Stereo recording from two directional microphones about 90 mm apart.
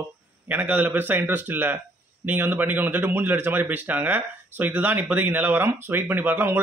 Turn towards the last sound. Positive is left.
turn(degrees=-20)  # may be behind; listen again after turning